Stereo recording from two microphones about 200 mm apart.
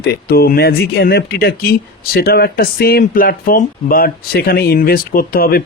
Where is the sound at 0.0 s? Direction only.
50° left (ahead or behind).